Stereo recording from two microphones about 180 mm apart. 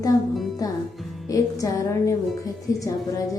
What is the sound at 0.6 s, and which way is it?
A woman's voice, 20° left (ahead or behind).